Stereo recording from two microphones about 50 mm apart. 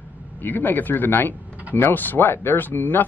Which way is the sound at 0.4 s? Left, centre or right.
Left.